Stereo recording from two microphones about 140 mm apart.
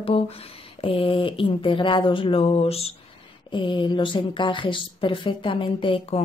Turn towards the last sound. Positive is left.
turn(degrees=40)  # may be behind; listen again after turning